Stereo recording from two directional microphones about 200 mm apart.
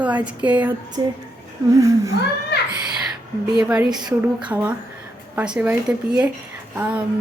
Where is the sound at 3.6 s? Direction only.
5° right (ahead or behind).